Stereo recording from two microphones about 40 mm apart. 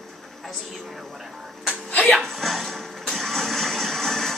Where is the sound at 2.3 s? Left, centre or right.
Centre.